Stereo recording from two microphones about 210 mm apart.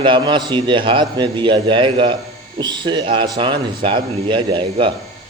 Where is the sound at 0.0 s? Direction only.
20° right (ahead or behind).